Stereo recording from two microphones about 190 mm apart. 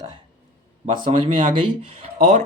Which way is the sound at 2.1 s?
40° right (ahead or behind).